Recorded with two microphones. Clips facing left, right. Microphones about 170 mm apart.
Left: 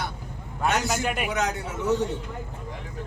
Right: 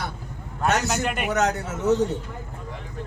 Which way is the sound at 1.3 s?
45° right (ahead or behind).